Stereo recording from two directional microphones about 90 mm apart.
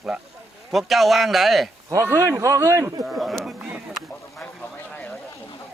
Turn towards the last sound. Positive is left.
turn(degrees=15)  # may be behind; listen again after turning